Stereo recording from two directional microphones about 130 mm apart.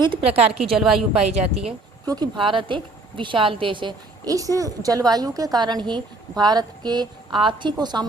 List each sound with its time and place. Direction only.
0.0 s a woman's voice: 45° right (ahead or behind)
0.8 s a woman's voice: 5° right (ahead or behind)
1.3 s a woman's voice: 50° right (ahead or behind)
2.0 s a woman's voice: 30° right (ahead or behind)